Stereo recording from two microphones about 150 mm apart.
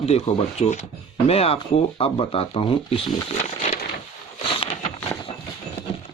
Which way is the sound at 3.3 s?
50° left (ahead or behind).